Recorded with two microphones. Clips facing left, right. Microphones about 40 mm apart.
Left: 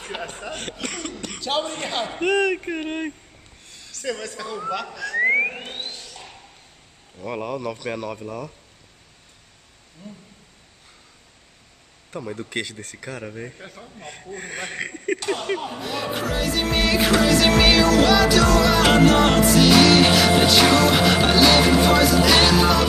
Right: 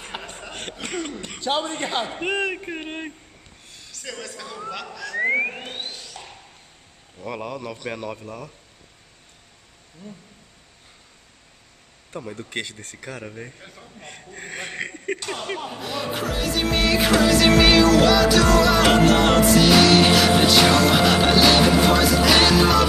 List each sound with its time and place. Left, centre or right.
0.2 s speech: centre
0.5 s a man's voice: centre
1.9 s speech: centre
2.5 s speech: centre
3.9 s music: centre
4.4 s speech: centre
12.3 s speech: centre
21.9 s music: centre